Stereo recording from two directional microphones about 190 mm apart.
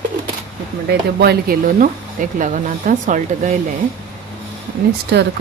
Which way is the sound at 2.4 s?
45° right (ahead or behind).